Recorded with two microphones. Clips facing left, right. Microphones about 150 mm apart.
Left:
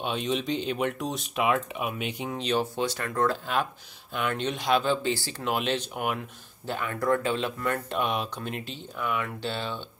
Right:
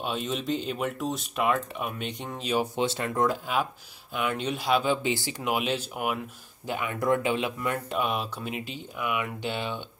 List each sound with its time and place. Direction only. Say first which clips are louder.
0.0 s speech: left 2 dB; centre (ahead or behind)
2.6 s speech: right 2 dB; 20° right (ahead or behind)
5.5 s speech: even; 10° right (ahead or behind)